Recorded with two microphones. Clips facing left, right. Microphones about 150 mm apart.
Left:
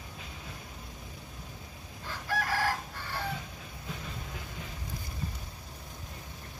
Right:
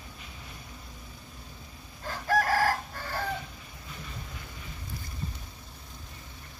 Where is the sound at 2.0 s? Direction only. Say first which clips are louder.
Right 7 dB; 45° right (ahead or behind).